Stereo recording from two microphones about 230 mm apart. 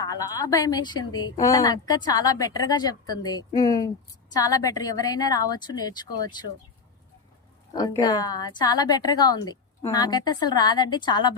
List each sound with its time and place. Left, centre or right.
0.0 s a woman's voice: centre
7.8 s a woman's voice: centre